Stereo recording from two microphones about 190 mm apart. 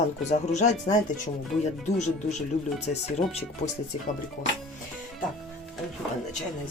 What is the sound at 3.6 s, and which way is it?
Speech, 40° left (ahead or behind).